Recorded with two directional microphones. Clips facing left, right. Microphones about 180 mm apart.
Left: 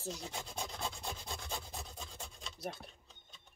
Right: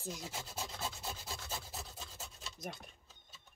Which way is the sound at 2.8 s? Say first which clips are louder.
Left 3 dB; 5° right (ahead or behind).